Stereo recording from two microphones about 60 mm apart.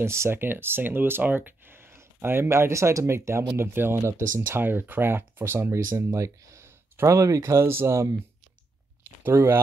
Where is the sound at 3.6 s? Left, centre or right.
Right.